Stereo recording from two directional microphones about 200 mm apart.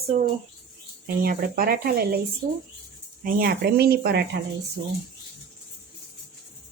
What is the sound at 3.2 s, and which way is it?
Speech, 50° right (ahead or behind).